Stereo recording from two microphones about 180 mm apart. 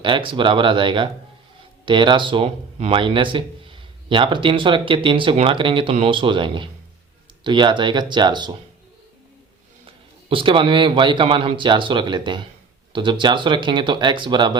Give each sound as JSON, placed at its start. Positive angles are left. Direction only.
{"t": 0.0, "sound": "speech", "side_deg": -30}
{"t": 9.8, "sound": "speech", "side_deg": -30}